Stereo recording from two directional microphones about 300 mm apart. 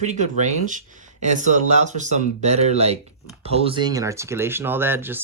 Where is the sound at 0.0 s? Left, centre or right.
Right.